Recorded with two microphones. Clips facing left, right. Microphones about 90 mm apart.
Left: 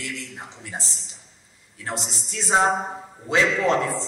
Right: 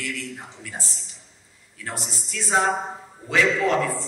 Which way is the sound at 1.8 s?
25° left (ahead or behind).